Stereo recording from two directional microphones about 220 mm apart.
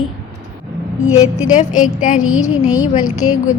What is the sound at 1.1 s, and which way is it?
A woman's voice, 35° left (ahead or behind).